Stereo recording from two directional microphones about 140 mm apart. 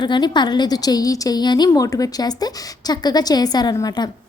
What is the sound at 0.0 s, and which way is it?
A woman's voice, 35° left (ahead or behind).